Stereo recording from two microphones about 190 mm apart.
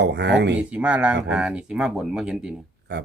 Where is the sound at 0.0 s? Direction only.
65° right (ahead or behind).